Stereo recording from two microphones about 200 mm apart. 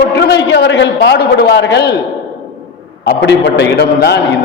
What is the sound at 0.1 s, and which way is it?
A man's voice, 55° left (ahead or behind).